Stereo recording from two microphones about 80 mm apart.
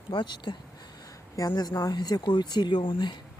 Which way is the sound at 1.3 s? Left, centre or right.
Left.